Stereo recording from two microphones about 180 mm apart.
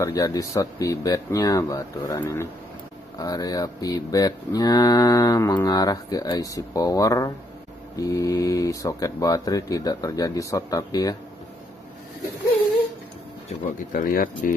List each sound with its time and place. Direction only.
0.0 s cattle: 20° left (ahead or behind)
13.9 s speech: 50° left (ahead or behind)